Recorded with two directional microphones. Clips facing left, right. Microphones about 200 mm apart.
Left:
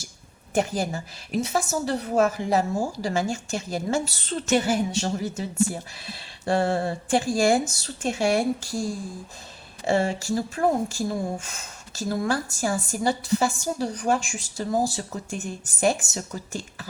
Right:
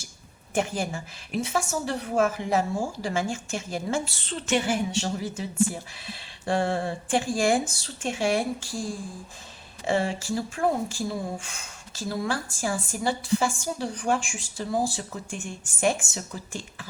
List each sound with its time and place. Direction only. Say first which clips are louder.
0.5 s speech: left 3 dB; 40° left (ahead or behind)
9.8 s speech: left 3 dB; 40° left (ahead or behind)